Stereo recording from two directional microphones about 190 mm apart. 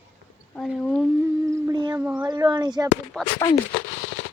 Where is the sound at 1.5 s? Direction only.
20° right (ahead or behind).